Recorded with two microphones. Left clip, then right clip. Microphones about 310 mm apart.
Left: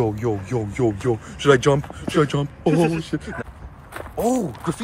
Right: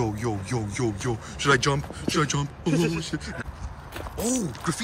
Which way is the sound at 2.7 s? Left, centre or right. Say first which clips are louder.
Left 6 dB; centre.